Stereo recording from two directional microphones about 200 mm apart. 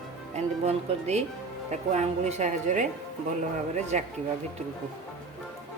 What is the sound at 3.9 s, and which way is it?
Speech, 35° right (ahead or behind).